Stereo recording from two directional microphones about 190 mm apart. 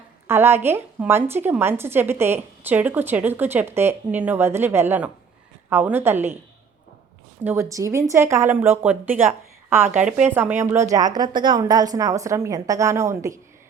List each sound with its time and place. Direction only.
0.3 s a woman's voice: 10° right (ahead or behind)
7.4 s a woman's voice: 15° right (ahead or behind)